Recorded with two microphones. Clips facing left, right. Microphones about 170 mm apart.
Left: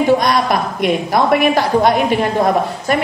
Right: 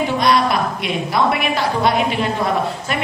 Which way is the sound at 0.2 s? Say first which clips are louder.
Even; 45° left (ahead or behind).